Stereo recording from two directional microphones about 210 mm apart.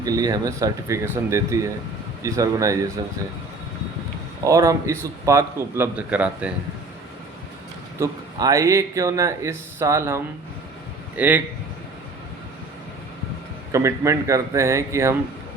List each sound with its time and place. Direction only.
0.0 s speech: 20° right (ahead or behind)
4.4 s speech: 15° right (ahead or behind)
7.9 s speech: 15° right (ahead or behind)
11.2 s speech: 10° right (ahead or behind)
13.7 s speech: 15° right (ahead or behind)